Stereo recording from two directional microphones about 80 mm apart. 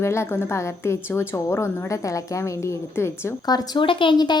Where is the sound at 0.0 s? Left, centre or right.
Left.